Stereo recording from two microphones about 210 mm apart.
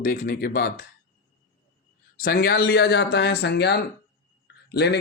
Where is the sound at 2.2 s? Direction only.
45° left (ahead or behind).